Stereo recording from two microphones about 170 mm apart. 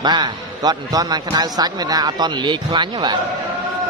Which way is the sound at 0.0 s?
25° right (ahead or behind).